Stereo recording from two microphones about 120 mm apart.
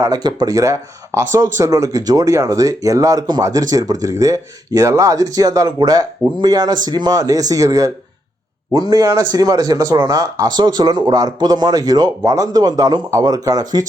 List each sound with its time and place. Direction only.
0.0 s speech: 35° right (ahead or behind)